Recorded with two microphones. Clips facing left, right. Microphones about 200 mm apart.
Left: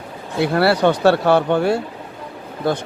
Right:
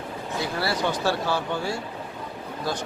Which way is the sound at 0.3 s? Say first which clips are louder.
Left 11 dB; 65° left (ahead or behind).